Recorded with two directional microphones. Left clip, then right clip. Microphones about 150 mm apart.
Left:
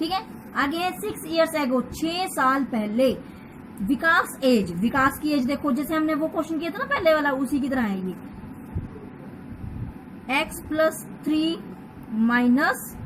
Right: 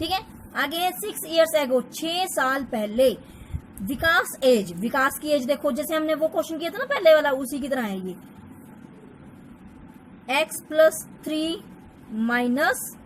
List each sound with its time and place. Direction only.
0.0 s a woman's voice: 65° right (ahead or behind)
10.2 s a woman's voice: 70° right (ahead or behind)